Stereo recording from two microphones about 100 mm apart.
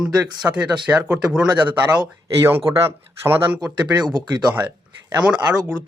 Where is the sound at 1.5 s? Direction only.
50° right (ahead or behind).